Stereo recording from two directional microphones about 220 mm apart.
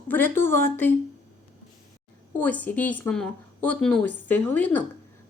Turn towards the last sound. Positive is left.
turn(degrees=10)  # may be behind; listen again after turning